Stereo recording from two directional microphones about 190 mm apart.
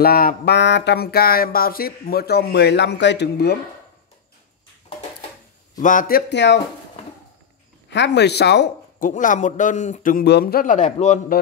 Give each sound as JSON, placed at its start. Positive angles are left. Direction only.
{"t": 0.0, "sound": "a sound", "side_deg": 50}
{"t": 5.8, "sound": "a man's voice", "side_deg": 45}
{"t": 7.9, "sound": "speech", "side_deg": 65}
{"t": 9.1, "sound": "a man's voice", "side_deg": 40}